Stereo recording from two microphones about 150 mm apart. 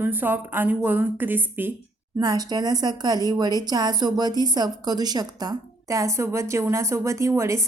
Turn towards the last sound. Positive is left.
turn(degrees=-20)  # may be behind; listen again after turning